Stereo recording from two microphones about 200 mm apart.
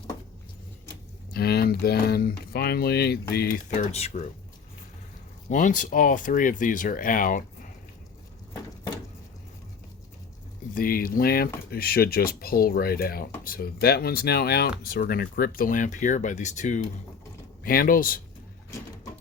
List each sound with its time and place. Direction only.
1.3 s speech: 50° left (ahead or behind)
3.9 s speech: 30° left (ahead or behind)
5.5 s speech: 40° left (ahead or behind)
10.8 s speech: 45° left (ahead or behind)